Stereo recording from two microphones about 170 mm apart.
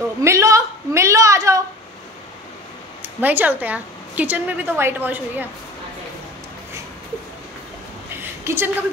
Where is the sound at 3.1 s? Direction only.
10° right (ahead or behind).